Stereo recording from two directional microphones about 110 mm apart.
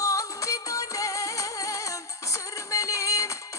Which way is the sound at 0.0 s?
30° left (ahead or behind).